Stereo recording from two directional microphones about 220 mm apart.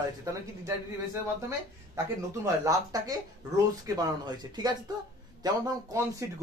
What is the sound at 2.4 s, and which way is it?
Speech, 15° right (ahead or behind).